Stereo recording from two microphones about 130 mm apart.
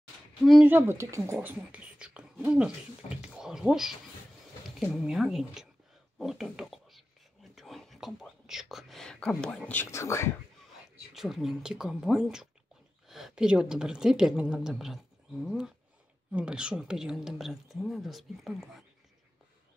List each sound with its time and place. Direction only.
0.4 s a woman's voice: centre (ahead or behind)
0.7 s speech: 15° right (ahead or behind); by 7.1 s centre (ahead or behind)
7.5 s whispering: centre (ahead or behind)
9.7 s speech: 20° left (ahead or behind)
11.1 s a woman's voice: centre (ahead or behind)